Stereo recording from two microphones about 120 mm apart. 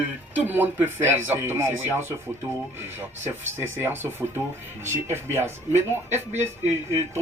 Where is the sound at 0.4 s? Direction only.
15° right (ahead or behind).